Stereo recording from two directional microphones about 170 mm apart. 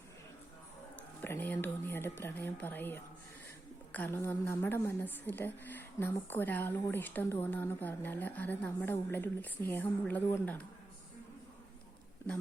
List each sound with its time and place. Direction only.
0.9 s a woman's voice: 10° left (ahead or behind)